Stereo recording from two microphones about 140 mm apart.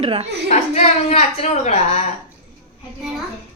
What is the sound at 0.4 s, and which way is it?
A woman's voice, 55° left (ahead or behind).